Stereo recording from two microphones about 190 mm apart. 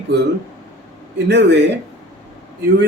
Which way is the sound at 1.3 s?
65° right (ahead or behind).